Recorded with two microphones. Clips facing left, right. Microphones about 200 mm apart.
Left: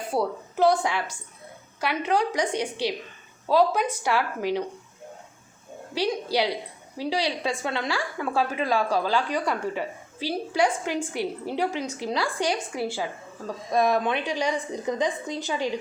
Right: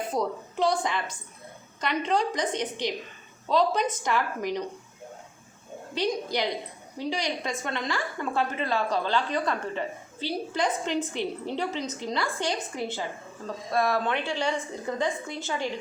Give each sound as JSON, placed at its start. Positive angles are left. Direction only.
{"t": 0.1, "sound": "a woman's voice", "side_deg": 5}
{"t": 5.9, "sound": "a woman's voice", "side_deg": 10}